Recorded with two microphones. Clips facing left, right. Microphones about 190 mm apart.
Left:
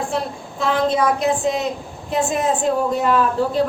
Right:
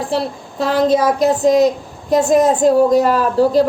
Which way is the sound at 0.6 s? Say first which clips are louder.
Right 4 dB; 40° right (ahead or behind).